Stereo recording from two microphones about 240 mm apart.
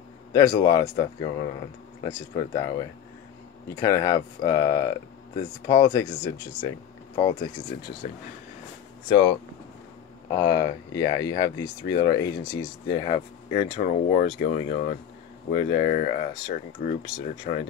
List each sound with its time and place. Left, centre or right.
0.3 s speech: centre
10.4 s speech: centre; by 17.6 s left